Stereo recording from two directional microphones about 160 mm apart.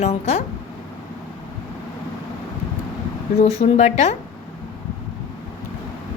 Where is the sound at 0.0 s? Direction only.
45° left (ahead or behind).